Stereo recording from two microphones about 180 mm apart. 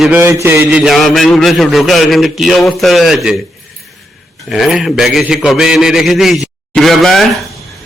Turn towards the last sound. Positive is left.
turn(degrees=0)  # may be behind; listen again after turning